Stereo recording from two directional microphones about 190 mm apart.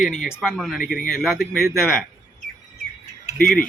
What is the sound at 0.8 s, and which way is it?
Speech, 45° left (ahead or behind).